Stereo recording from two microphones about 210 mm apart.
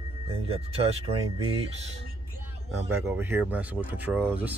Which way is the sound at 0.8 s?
25° right (ahead or behind).